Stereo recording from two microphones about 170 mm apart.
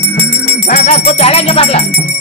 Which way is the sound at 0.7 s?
40° left (ahead or behind).